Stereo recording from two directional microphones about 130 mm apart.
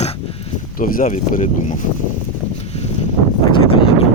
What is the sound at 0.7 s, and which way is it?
Speech, 90° left.